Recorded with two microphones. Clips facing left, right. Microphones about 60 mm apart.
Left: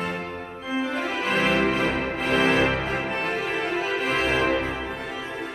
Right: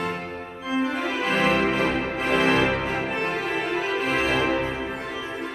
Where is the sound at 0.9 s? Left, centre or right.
Centre.